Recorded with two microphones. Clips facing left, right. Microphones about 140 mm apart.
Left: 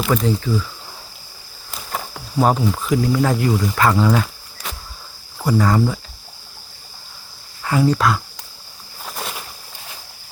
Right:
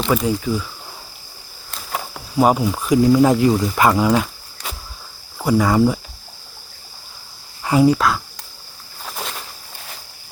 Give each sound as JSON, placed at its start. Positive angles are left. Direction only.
{"t": 0.1, "sound": "speech", "side_deg": -5}
{"t": 1.7, "sound": "speech", "side_deg": 0}
{"t": 7.6, "sound": "speech", "side_deg": -20}
{"t": 7.9, "sound": "speech", "side_deg": 0}
{"t": 9.0, "sound": "a sound", "side_deg": 0}